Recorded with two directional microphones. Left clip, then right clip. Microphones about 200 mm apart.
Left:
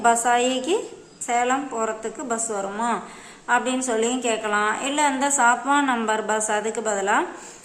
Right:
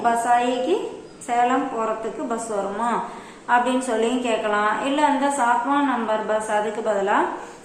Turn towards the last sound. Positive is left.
turn(degrees=25)  # may be behind; listen again after turning